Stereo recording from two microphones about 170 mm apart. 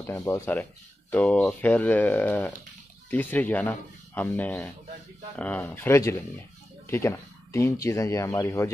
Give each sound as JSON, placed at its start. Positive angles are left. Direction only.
{"t": 0.0, "sound": "speech", "side_deg": 15}